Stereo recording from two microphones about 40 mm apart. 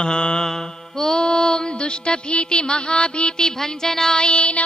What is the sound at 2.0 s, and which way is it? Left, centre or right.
A man's voice, left.